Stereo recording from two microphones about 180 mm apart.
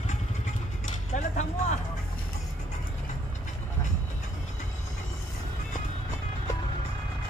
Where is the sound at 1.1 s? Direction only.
45° left (ahead or behind).